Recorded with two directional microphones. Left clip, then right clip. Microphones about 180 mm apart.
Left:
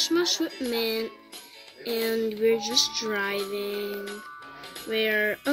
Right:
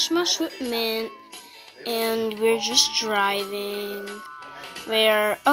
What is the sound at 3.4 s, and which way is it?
Speech, 45° right (ahead or behind).